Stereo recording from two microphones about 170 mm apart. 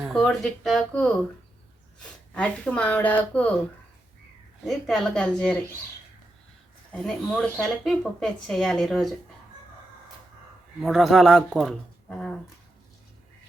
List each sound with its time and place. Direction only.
0.0 s speech: centre (ahead or behind)
4.6 s speech: centre (ahead or behind)
6.9 s speech: 5° left (ahead or behind)
10.8 s speech: centre (ahead or behind)